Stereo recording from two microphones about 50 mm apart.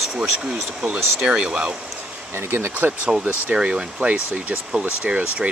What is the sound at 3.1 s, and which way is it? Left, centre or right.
Speech, centre.